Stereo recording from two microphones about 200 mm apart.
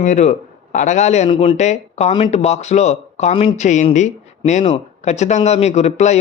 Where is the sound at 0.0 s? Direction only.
35° left (ahead or behind).